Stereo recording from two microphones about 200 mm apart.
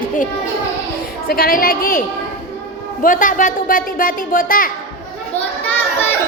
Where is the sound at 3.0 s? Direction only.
40° left (ahead or behind).